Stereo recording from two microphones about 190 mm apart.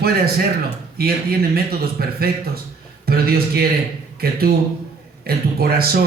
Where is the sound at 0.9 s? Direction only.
55° right (ahead or behind).